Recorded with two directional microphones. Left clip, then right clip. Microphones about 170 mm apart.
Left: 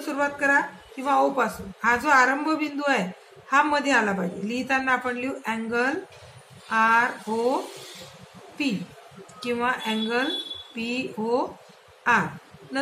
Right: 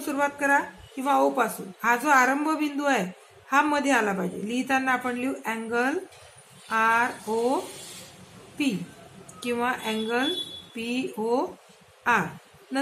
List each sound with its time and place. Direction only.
0.0 s a woman's voice: 45° right (ahead or behind)
9.4 s a woman's voice: 45° right (ahead or behind)